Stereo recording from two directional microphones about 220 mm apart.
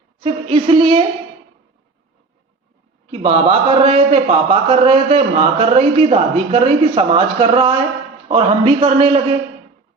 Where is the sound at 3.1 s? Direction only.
25° right (ahead or behind).